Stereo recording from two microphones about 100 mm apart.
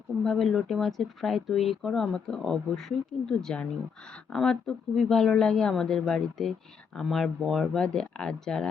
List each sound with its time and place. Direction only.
0.3 s a woman's voice: 5° left (ahead or behind)